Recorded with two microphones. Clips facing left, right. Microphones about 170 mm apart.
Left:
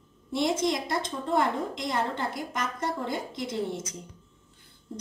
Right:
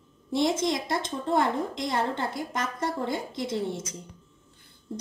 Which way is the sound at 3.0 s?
30° right (ahead or behind).